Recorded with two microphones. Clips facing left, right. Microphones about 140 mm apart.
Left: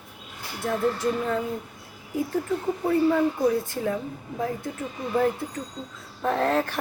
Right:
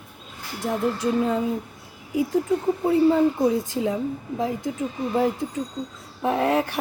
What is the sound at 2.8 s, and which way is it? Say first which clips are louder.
A woman's voice: right 3 dB; 20° right (ahead or behind).